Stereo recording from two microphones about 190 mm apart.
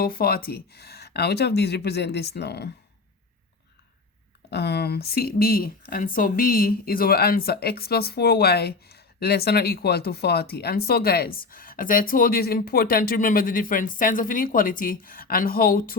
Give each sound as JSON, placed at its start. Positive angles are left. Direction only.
{"t": 0.0, "sound": "speech", "side_deg": 50}
{"t": 4.5, "sound": "speech", "side_deg": 60}